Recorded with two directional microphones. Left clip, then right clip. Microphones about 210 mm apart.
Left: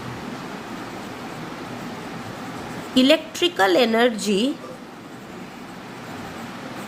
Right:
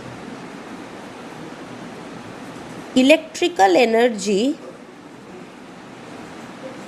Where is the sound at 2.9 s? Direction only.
20° right (ahead or behind).